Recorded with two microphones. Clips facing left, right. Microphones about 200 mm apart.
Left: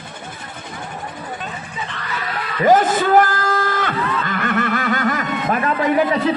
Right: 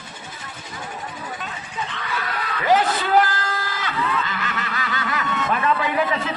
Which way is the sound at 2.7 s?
50° left (ahead or behind).